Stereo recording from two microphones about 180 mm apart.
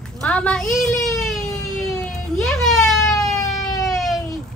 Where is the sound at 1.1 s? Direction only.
Centre (ahead or behind).